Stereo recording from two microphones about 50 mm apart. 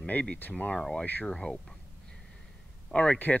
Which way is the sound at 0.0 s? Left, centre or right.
Left.